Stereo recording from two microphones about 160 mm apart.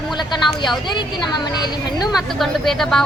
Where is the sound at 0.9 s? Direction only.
25° left (ahead or behind).